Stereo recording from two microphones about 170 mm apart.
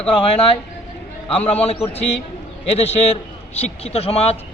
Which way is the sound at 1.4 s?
40° left (ahead or behind).